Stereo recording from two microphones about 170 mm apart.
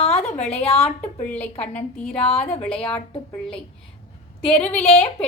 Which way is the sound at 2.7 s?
30° left (ahead or behind).